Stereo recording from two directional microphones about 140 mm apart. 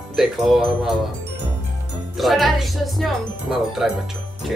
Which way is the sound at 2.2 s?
Centre (ahead or behind).